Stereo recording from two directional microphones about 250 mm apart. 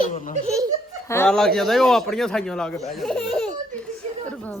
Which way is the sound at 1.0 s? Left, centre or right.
Centre.